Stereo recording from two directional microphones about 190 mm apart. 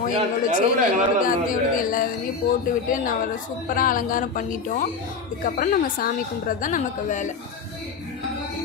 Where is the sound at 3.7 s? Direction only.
45° left (ahead or behind).